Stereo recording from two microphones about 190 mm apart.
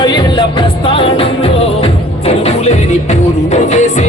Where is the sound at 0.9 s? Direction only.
30° left (ahead or behind).